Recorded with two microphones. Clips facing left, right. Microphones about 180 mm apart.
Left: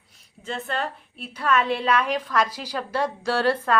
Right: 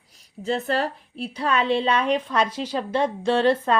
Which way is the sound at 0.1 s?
35° right (ahead or behind).